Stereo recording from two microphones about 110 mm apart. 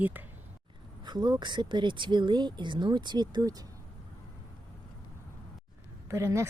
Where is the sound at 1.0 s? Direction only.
40° right (ahead or behind).